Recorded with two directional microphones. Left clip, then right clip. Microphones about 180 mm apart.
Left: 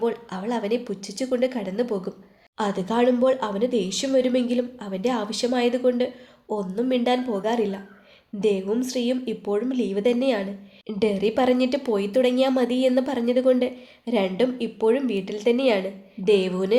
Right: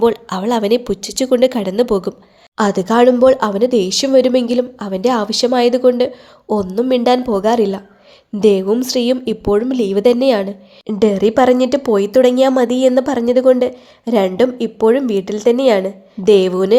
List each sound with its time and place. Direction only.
0.0 s a woman's voice: 50° right (ahead or behind)